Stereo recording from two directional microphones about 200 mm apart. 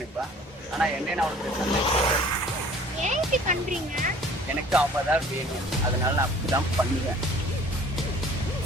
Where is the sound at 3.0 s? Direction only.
35° right (ahead or behind).